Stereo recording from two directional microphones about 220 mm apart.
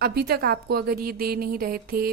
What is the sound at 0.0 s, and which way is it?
A woman's voice, 45° right (ahead or behind).